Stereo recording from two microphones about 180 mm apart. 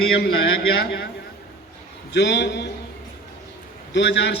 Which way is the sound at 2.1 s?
75° left (ahead or behind).